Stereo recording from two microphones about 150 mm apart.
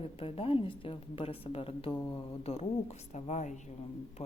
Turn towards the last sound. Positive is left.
turn(degrees=40)  # may be behind; listen again after turning